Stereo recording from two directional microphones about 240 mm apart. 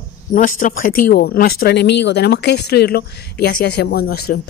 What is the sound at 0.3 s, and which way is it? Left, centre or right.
A woman's voice, left.